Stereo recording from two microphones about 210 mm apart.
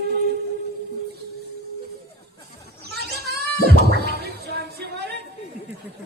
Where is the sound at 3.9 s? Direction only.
50° right (ahead or behind).